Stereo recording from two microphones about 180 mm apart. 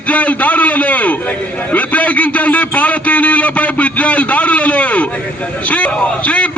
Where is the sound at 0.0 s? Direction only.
10° left (ahead or behind).